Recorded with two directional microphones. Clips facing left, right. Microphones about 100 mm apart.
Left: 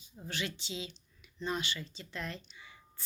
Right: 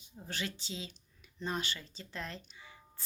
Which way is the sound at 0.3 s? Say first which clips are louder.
Left 1 dB; 40° right (ahead or behind).